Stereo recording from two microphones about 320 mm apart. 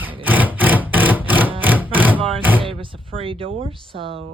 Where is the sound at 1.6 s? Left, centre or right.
Centre.